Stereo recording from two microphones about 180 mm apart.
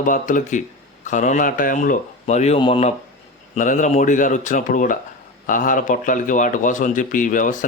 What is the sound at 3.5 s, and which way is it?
A man's voice, 45° left (ahead or behind).